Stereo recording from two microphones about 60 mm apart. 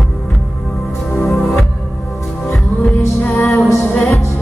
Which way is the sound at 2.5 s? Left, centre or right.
Left.